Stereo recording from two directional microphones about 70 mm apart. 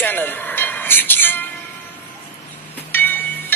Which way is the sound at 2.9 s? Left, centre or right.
Left.